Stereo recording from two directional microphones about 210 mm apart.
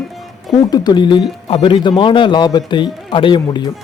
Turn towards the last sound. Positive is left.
turn(degrees=25)  # may be behind; listen again after turning